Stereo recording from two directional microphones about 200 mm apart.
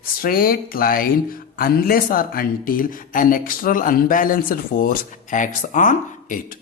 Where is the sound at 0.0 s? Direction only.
45° left (ahead or behind).